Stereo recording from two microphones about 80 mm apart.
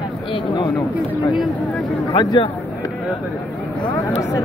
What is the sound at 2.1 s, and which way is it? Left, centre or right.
Speech, left.